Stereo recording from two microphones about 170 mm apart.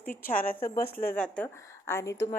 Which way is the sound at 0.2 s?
55° left (ahead or behind).